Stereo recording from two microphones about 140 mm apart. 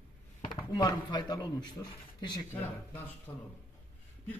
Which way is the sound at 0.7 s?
30° left (ahead or behind).